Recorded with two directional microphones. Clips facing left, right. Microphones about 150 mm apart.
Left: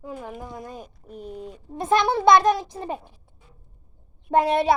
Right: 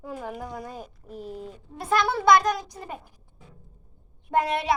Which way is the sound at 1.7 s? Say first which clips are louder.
Left 4 dB; 20° left (ahead or behind).